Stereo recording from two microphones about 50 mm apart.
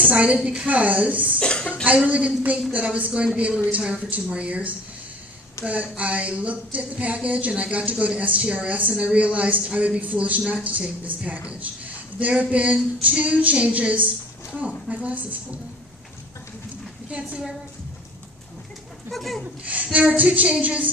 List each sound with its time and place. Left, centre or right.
0.0 s a woman's voice: right
1.4 s speech: centre
1.7 s speech: right
17.1 s speech: right
19.1 s speech: centre
19.6 s speech: right